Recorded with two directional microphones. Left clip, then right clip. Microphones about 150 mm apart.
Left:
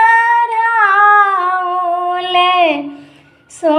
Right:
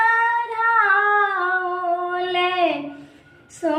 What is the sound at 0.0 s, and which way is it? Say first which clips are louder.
Female singing: left 8 dB; 10° left (ahead or behind).